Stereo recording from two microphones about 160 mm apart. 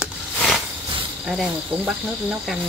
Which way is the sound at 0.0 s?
Centre (ahead or behind).